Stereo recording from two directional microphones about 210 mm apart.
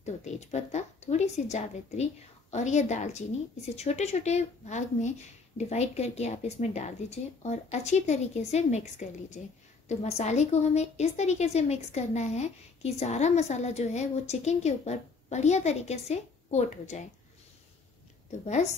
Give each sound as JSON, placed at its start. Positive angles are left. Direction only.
{"t": 0.0, "sound": "a woman's voice", "side_deg": 35}
{"t": 9.8, "sound": "a woman's voice", "side_deg": 30}